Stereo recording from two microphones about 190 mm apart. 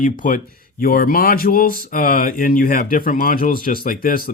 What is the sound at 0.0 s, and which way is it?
Speech, 45° left (ahead or behind).